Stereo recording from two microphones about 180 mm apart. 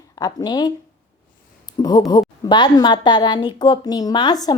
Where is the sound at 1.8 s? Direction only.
20° left (ahead or behind).